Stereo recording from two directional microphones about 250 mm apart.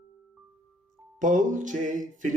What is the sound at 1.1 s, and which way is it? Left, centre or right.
Speech, right.